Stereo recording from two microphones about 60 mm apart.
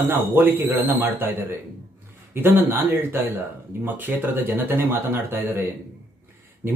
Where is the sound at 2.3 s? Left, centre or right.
Right.